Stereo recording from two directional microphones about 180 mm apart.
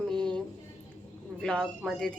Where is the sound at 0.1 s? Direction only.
5° left (ahead or behind).